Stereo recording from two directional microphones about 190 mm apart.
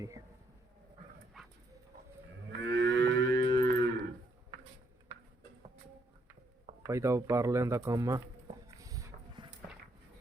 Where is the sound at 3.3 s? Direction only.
25° left (ahead or behind).